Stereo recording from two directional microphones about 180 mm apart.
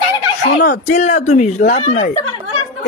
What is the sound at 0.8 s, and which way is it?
Speech, 40° left (ahead or behind).